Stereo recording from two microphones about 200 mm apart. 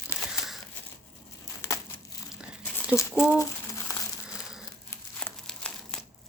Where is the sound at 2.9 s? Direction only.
5° left (ahead or behind).